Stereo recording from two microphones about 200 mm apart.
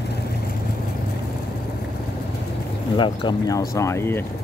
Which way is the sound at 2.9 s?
20° left (ahead or behind).